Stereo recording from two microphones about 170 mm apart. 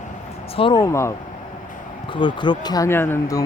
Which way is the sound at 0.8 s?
15° left (ahead or behind).